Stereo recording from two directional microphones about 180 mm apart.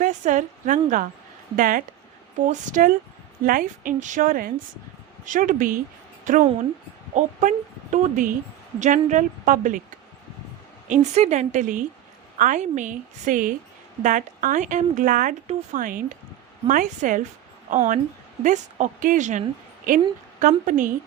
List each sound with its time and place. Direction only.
0.0 s a woman's voice: 45° right (ahead or behind)
11.1 s a woman's voice: 40° right (ahead or behind)
20.4 s a woman's voice: 45° right (ahead or behind)